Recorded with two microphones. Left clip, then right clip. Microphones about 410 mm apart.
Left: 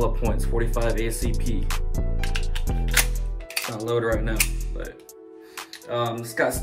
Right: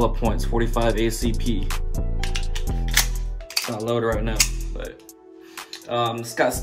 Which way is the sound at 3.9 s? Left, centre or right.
Centre.